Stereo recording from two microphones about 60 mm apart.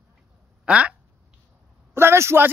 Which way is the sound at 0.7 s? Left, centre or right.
Centre.